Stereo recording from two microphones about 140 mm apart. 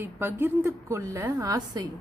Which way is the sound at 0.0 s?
15° right (ahead or behind).